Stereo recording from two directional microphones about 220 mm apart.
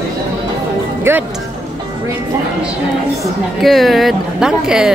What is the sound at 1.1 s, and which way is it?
Speech, 10° right (ahead or behind).